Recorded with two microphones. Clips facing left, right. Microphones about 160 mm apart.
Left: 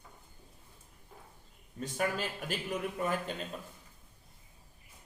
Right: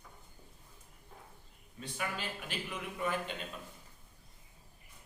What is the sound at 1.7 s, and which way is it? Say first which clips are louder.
A man's voice: left 7 dB; 40° left (ahead or behind).